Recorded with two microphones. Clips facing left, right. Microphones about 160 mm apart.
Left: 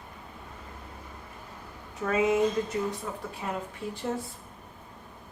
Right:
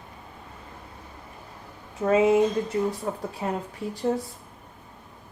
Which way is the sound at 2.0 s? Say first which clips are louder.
Right 5 dB; 30° right (ahead or behind).